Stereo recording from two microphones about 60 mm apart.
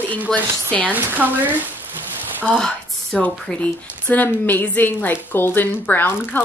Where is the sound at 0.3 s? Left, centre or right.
Left.